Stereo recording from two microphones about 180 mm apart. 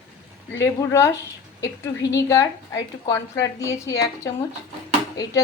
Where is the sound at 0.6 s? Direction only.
15° left (ahead or behind).